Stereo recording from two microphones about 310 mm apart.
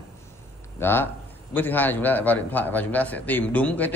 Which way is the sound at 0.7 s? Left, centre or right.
Centre.